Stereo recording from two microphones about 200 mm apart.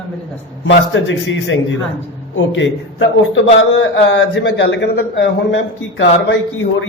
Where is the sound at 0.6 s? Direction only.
70° left (ahead or behind).